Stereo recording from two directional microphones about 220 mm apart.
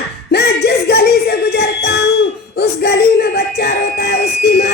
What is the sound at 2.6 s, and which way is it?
Music, 50° left (ahead or behind).